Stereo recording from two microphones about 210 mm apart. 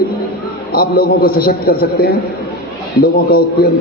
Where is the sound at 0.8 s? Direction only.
45° left (ahead or behind).